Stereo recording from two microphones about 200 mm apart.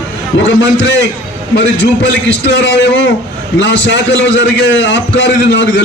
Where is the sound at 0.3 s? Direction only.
60° left (ahead or behind).